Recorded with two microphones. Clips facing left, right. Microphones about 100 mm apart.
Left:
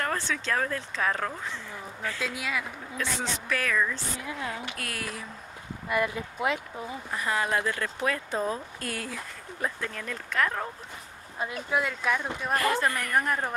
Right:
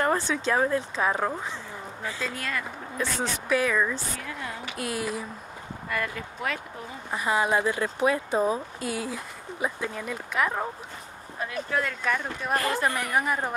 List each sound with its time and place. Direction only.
0.0 s speech: 15° right (ahead or behind)
2.1 s speech: 5° left (ahead or behind)
3.0 s speech: 10° right (ahead or behind)
4.2 s speech: 15° left (ahead or behind)
4.7 s speech: 20° right (ahead or behind)
5.9 s speech: 20° left (ahead or behind)
7.1 s speech: 20° right (ahead or behind)
11.3 s speech: 15° left (ahead or behind)
12.7 s speech: 15° right (ahead or behind)